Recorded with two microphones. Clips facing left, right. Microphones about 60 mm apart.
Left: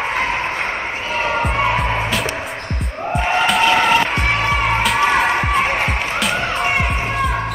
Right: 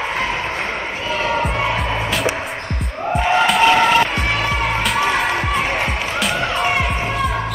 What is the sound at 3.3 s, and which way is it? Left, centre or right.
Vehicle, centre.